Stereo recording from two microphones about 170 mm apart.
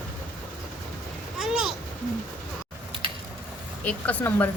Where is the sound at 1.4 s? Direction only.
Centre (ahead or behind).